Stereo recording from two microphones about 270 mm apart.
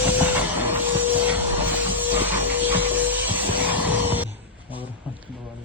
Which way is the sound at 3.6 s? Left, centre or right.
Centre.